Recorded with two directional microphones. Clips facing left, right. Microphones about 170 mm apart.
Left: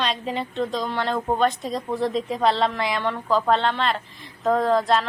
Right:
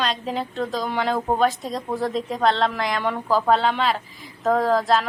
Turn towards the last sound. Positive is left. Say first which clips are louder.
# even
turn(degrees=0)  # may be behind; listen again after turning